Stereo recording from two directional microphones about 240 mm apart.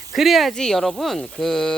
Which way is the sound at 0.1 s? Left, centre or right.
Centre.